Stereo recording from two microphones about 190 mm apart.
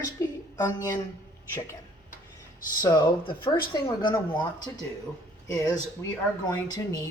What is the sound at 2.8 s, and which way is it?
Speech, 20° left (ahead or behind).